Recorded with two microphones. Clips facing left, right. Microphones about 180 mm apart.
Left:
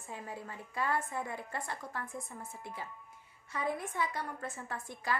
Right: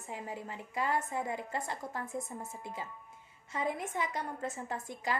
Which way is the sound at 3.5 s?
20° right (ahead or behind).